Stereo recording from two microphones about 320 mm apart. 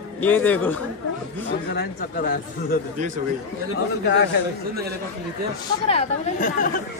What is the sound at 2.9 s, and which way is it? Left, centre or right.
Speech, right.